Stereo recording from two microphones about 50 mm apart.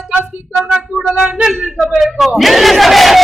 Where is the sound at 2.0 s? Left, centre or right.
Centre.